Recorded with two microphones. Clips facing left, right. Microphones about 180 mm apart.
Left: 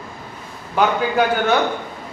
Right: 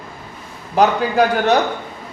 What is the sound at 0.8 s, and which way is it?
Speech, 40° right (ahead or behind).